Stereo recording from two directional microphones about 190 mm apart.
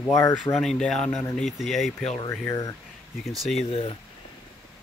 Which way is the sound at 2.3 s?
15° left (ahead or behind).